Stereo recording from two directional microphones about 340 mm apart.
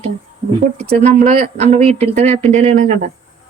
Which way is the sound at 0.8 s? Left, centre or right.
Right.